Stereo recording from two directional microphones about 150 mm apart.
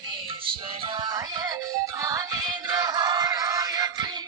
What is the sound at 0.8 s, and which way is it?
Music, 30° right (ahead or behind).